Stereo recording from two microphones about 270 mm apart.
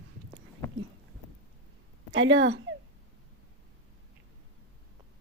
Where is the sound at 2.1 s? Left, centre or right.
Right.